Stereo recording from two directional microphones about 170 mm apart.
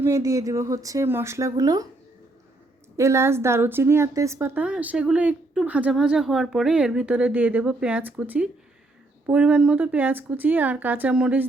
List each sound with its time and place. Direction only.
0.0 s speech: 20° right (ahead or behind)
2.9 s a woman's voice: 15° right (ahead or behind)